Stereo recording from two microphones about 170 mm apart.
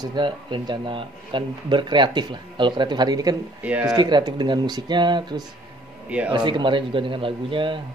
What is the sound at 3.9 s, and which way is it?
A man's voice, 25° right (ahead or behind).